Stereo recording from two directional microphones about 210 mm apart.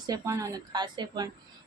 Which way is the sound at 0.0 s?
15° right (ahead or behind).